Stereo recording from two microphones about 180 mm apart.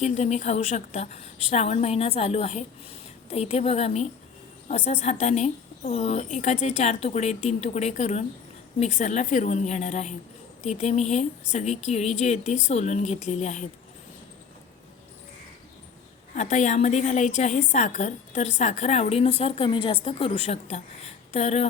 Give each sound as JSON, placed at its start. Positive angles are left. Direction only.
{"t": 0.0, "sound": "a woman's voice", "side_deg": 40}
{"t": 16.3, "sound": "a woman's voice", "side_deg": 40}